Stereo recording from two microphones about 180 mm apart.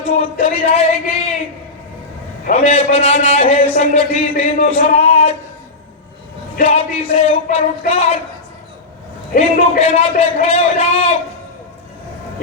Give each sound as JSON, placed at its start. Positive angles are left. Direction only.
{"t": 0.2, "sound": "a man's voice", "side_deg": 35}
{"t": 2.5, "sound": "a man's voice", "side_deg": 35}
{"t": 6.6, "sound": "a man's voice", "side_deg": 35}
{"t": 9.3, "sound": "a man's voice", "side_deg": 40}